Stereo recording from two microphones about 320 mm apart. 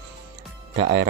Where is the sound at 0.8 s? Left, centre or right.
Right.